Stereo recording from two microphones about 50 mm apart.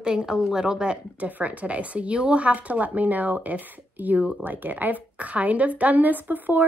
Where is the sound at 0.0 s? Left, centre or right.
Centre.